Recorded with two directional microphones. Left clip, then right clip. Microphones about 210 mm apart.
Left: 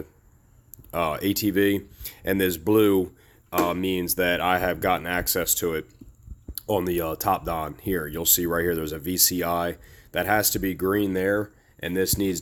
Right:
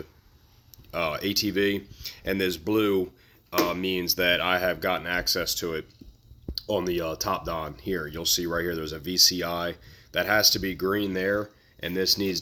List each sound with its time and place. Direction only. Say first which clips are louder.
0.9 s speech: left 3 dB; 45° left (ahead or behind)